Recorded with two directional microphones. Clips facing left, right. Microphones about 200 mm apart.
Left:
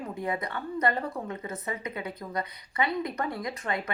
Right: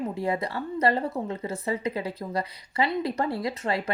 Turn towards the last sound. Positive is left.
turn(degrees=-30)  # may be behind; listen again after turning